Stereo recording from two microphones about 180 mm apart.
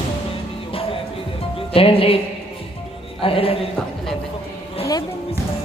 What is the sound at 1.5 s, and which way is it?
Music, 30° left (ahead or behind).